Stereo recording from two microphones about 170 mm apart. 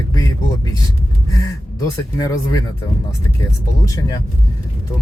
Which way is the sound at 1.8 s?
20° left (ahead or behind).